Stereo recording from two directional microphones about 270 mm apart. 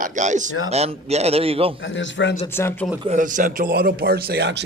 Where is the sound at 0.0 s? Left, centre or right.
Right.